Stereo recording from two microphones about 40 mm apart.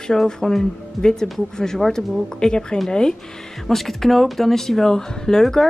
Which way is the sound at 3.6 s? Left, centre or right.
Centre.